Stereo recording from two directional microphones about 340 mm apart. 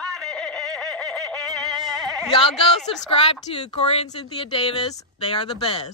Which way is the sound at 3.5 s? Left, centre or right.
Centre.